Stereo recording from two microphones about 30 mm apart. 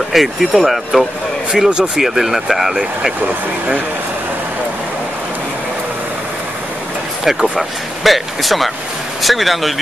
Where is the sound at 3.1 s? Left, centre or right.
Right.